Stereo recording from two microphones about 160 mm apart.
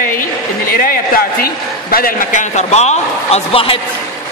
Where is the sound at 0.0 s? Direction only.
65° left (ahead or behind); by 3.8 s 35° left (ahead or behind).